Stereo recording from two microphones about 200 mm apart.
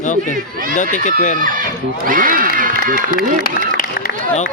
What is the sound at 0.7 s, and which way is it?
Speech, 40° left (ahead or behind).